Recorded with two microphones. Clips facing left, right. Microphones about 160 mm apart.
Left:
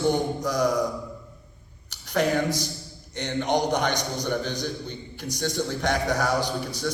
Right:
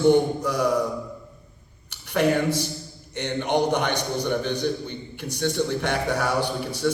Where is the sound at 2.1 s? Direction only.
60° right (ahead or behind).